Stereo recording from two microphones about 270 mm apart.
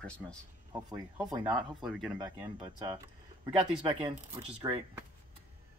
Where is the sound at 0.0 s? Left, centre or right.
Centre.